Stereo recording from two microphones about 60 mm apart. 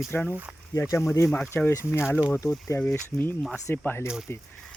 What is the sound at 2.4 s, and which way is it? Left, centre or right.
Speech, left.